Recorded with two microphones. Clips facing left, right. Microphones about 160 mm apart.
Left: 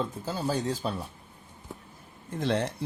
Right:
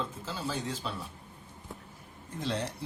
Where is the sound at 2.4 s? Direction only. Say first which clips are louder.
Left 6 dB; 60° left (ahead or behind).